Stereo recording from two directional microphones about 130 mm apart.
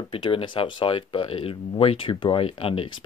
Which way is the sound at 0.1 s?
40° left (ahead or behind).